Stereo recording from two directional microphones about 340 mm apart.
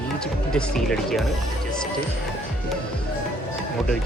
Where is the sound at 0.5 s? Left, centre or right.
Centre.